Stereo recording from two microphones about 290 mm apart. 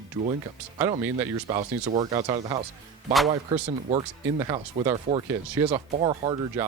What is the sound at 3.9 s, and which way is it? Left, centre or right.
Speech, centre.